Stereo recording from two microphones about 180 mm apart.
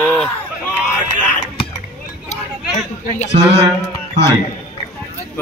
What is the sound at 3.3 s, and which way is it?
Speech, 30° right (ahead or behind).